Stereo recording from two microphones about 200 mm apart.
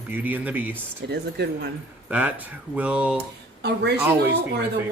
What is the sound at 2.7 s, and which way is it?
Speech, 5° right (ahead or behind).